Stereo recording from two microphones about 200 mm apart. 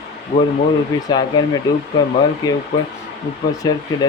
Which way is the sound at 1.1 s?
20° left (ahead or behind).